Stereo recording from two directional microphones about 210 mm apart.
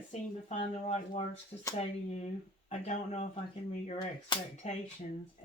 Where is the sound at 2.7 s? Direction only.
35° left (ahead or behind).